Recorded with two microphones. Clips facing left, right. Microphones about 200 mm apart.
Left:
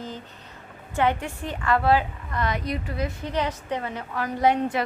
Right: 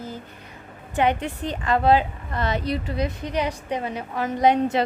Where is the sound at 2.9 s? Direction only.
15° right (ahead or behind).